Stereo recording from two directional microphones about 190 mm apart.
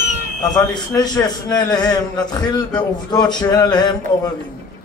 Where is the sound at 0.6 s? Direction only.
20° left (ahead or behind).